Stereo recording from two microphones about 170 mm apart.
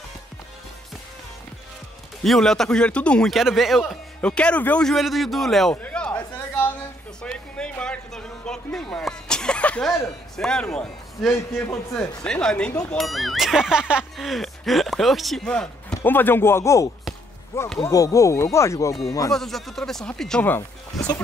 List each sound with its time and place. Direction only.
2.2 s a man's voice: 5° left (ahead or behind)
7.2 s music: 5° left (ahead or behind)
10.3 s speech: 5° left (ahead or behind); by 19.3 s 20° left (ahead or behind)
19.3 s speech: centre (ahead or behind)